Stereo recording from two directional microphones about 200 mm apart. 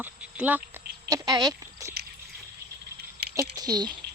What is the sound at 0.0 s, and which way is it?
Speech, 10° right (ahead or behind).